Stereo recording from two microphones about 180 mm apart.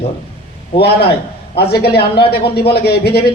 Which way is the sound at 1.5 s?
65° left (ahead or behind).